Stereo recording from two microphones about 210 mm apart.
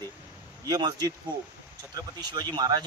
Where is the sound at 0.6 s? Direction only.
20° right (ahead or behind).